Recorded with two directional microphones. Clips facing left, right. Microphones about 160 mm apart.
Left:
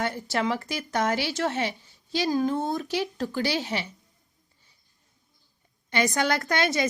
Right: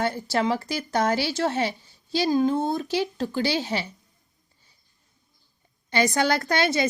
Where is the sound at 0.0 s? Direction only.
30° right (ahead or behind).